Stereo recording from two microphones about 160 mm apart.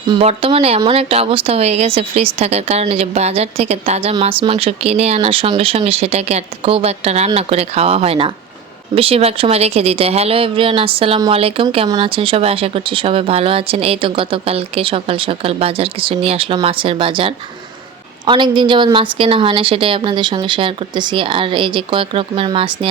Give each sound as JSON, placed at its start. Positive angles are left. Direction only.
{"t": 0.2, "sound": "speech", "side_deg": -35}